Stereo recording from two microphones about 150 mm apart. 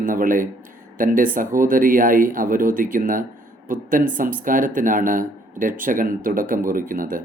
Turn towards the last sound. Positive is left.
turn(degrees=-65)  # may be behind; listen again after turning